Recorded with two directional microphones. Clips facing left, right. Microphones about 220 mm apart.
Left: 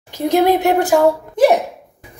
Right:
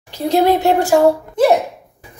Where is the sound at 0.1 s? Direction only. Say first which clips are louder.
Even; 20° left (ahead or behind).